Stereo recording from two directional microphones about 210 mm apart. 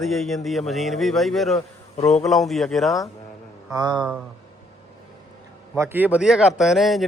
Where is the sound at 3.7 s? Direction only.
20° right (ahead or behind).